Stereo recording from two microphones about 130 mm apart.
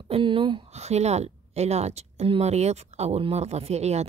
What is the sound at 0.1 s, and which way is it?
Speech, 40° right (ahead or behind).